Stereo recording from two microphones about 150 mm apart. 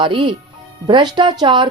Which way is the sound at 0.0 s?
35° right (ahead or behind).